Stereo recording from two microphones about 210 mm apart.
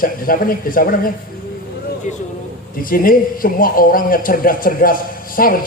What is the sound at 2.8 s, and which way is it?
A man's voice, 40° left (ahead or behind).